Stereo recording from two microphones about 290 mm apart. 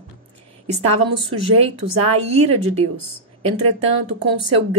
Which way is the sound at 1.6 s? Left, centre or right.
Right.